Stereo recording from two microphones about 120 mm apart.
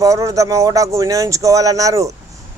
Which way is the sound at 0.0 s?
25° right (ahead or behind).